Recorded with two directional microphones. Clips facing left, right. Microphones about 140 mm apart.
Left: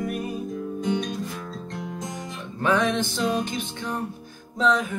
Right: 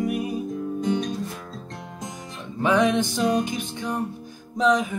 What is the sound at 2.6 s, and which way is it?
Music, 15° right (ahead or behind).